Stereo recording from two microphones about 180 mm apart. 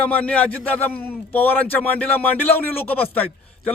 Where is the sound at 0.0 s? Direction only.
10° left (ahead or behind).